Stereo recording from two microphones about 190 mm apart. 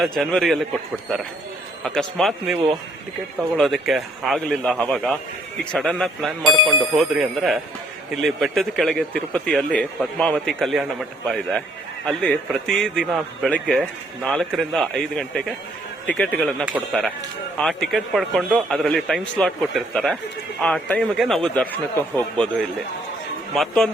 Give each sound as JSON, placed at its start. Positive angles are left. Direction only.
{"t": 0.0, "sound": "a man's voice", "side_deg": 0}
{"t": 1.8, "sound": "a man's voice", "side_deg": 5}
{"t": 3.6, "sound": "a man's voice", "side_deg": 0}